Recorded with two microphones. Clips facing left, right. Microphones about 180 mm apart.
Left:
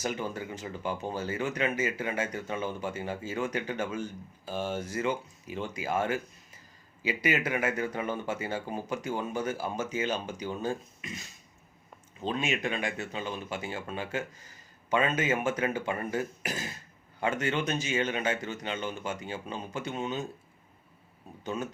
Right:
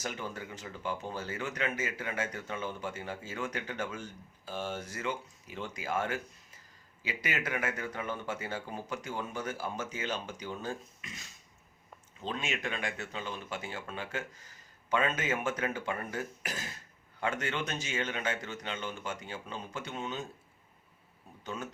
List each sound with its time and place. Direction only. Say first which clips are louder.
0.0 s speech: left 6 dB; 10° left (ahead or behind)
12.2 s speech: left 5 dB; 15° left (ahead or behind)
21.4 s speech: left 6 dB; 20° left (ahead or behind)